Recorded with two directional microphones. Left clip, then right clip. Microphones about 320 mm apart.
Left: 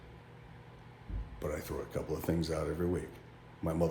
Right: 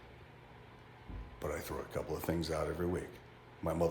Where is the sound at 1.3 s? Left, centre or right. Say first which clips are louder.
Left 2 dB; centre.